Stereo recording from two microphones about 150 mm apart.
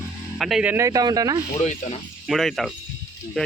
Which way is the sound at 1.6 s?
50° left (ahead or behind).